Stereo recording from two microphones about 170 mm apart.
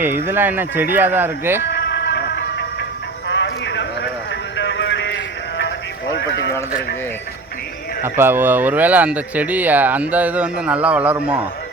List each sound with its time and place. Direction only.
0.3 s speech: 10° right (ahead or behind)
1.6 s music: 85° left
3.2 s clip-clop: 90° left
4.5 s a sound: 90° left
6.1 s sheep: 90° left
8.0 s speech: 15° right (ahead or behind)